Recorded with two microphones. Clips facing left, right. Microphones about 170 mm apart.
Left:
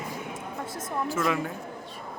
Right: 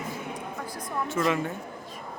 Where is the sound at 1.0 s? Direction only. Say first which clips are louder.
Right 2 dB; centre (ahead or behind).